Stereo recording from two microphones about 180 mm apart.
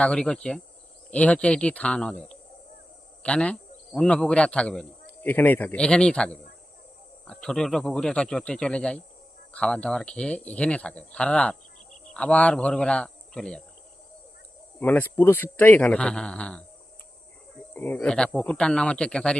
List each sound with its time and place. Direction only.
0.0 s speech: 5° left (ahead or behind)
3.2 s a man's voice: 5° left (ahead or behind)
7.4 s speech: 5° left (ahead or behind)
14.8 s speech: 10° left (ahead or behind)
17.7 s speech: 10° left (ahead or behind)